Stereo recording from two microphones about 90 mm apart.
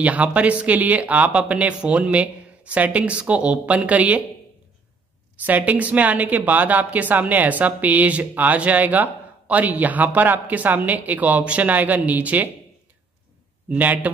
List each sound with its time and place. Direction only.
0.0 s a woman's voice: 15° right (ahead or behind)
5.4 s a woman's voice: 20° right (ahead or behind)
13.7 s a woman's voice: 20° right (ahead or behind)